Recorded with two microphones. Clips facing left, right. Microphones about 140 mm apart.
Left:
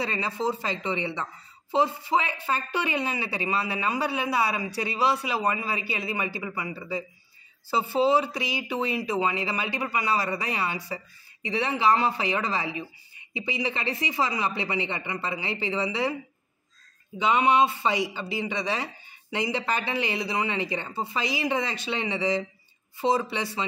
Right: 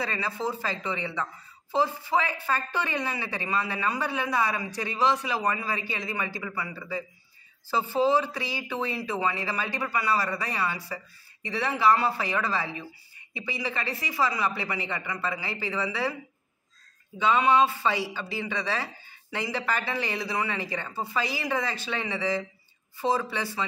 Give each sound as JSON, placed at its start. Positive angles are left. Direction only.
{"t": 0.0, "sound": "speech", "side_deg": 20}
{"t": 17.2, "sound": "speech", "side_deg": 15}